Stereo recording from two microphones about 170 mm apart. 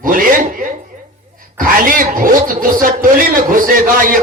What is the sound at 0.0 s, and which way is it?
Speech, 55° right (ahead or behind).